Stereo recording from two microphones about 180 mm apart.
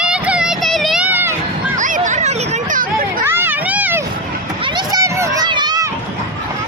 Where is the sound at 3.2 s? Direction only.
15° right (ahead or behind).